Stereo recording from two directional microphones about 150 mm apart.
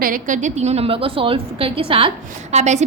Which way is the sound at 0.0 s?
60° right (ahead or behind).